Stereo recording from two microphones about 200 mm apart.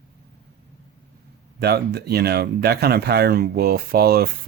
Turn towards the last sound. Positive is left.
turn(degrees=-50)  # may be behind; listen again after turning